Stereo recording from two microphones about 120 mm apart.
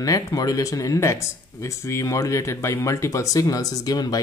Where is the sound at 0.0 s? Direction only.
30° left (ahead or behind).